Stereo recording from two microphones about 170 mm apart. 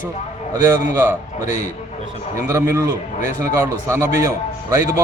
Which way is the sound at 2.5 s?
15° right (ahead or behind).